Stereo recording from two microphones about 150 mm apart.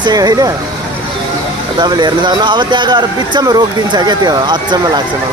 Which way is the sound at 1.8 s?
30° right (ahead or behind).